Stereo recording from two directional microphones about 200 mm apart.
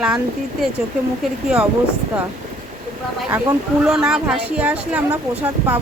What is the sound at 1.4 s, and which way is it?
Speech, 5° right (ahead or behind).